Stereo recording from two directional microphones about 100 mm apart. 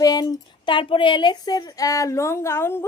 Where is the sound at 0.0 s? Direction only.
40° left (ahead or behind).